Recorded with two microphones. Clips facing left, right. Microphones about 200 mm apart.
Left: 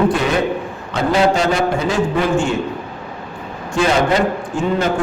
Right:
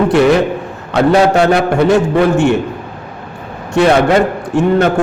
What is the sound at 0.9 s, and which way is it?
A man's voice, 65° right (ahead or behind).